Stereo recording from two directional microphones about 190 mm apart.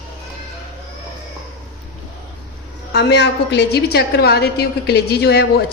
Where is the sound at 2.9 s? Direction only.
65° left (ahead or behind).